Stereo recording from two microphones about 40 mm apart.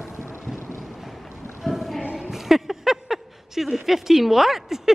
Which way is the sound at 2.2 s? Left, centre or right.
Centre.